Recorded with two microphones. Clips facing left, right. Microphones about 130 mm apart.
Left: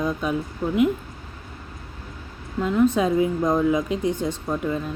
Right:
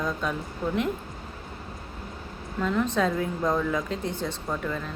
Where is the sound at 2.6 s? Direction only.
10° left (ahead or behind).